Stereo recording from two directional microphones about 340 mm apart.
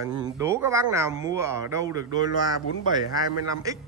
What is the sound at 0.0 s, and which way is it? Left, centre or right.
A man's voice, centre.